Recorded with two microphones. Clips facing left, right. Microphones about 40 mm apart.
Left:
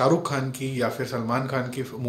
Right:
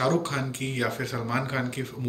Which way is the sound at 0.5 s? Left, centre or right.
Right.